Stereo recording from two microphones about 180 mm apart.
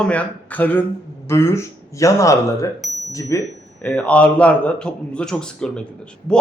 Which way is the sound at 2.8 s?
Centre (ahead or behind).